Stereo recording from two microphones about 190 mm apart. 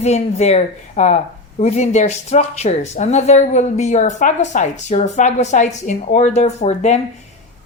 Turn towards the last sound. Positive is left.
turn(degrees=35)  # may be behind; listen again after turning